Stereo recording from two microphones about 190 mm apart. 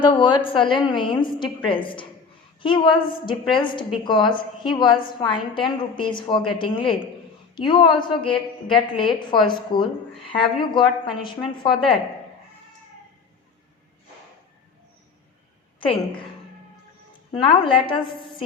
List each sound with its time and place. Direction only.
0.0 s a woman's voice: 25° left (ahead or behind)
17.4 s a woman's voice: 25° left (ahead or behind)